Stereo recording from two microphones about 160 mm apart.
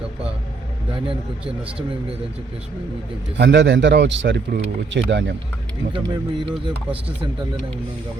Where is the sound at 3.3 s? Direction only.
90° right.